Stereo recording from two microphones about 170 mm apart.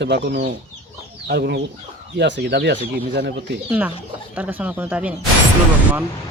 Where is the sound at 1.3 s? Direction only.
75° right (ahead or behind).